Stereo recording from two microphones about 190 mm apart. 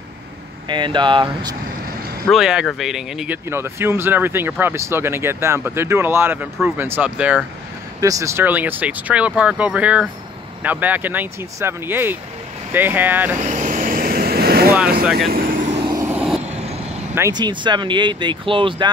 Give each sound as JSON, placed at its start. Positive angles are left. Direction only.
{"t": 0.7, "sound": "speech", "side_deg": -25}
{"t": 2.2, "sound": "speech", "side_deg": 0}
{"t": 3.4, "sound": "speech", "side_deg": -15}
{"t": 8.0, "sound": "speech", "side_deg": -15}
{"t": 13.4, "sound": "vehicle", "side_deg": -40}
{"t": 15.7, "sound": "vehicle", "side_deg": -20}
{"t": 16.1, "sound": "vehicle", "side_deg": -5}
{"t": 17.1, "sound": "speech", "side_deg": -20}